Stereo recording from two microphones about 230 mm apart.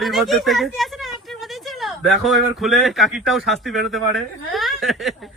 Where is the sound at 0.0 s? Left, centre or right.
Centre.